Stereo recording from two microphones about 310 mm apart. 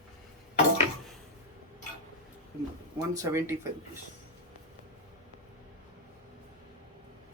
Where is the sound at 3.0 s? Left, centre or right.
Centre.